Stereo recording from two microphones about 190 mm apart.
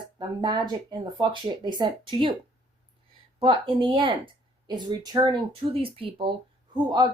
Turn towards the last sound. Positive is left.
turn(degrees=-20)  # may be behind; listen again after turning